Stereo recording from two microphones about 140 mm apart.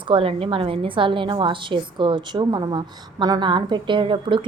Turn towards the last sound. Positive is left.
turn(degrees=-35)  # may be behind; listen again after turning